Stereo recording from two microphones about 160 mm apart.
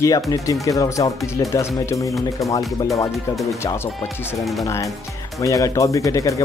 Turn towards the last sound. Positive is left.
turn(degrees=20)  # may be behind; listen again after turning